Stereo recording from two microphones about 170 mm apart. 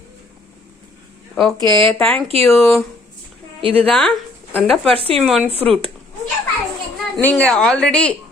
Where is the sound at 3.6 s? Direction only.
35° right (ahead or behind).